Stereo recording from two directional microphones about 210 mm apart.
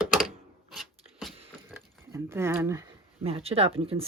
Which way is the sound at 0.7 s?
Centre (ahead or behind).